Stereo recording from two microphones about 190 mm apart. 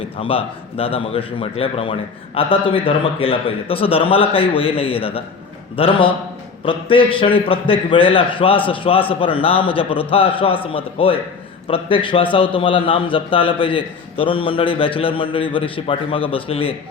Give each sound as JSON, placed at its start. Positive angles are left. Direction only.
{"t": 0.2, "sound": "a man's voice", "side_deg": 30}